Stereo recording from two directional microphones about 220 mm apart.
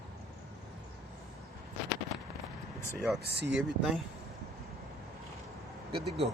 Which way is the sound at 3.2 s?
50° right (ahead or behind).